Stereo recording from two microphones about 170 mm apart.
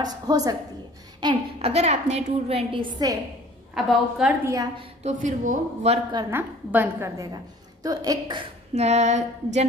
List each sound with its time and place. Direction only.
0.0 s a woman's voice: 20° right (ahead or behind)
1.2 s a woman's voice: 30° right (ahead or behind)
3.7 s a woman's voice: centre (ahead or behind)
4.5 s a woman's voice: 20° right (ahead or behind)
5.0 s speech: 45° right (ahead or behind)
6.3 s a woman's voice: 10° right (ahead or behind)
8.7 s a woman's voice: 40° right (ahead or behind)